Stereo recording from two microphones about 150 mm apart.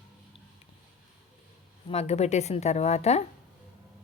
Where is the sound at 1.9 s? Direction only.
45° left (ahead or behind).